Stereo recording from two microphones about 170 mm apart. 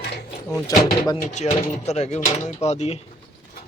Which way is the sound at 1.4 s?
40° left (ahead or behind).